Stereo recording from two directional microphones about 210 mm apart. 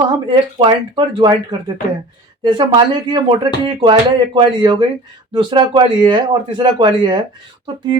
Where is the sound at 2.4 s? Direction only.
20° right (ahead or behind).